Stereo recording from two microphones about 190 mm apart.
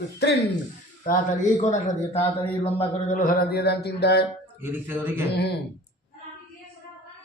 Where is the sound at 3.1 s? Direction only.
45° left (ahead or behind); by 4.3 s 60° left (ahead or behind).